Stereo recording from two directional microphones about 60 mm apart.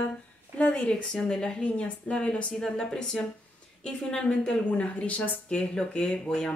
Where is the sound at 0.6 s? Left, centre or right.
Left.